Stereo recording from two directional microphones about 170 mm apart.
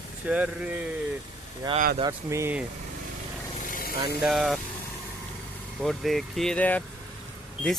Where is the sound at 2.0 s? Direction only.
20° right (ahead or behind).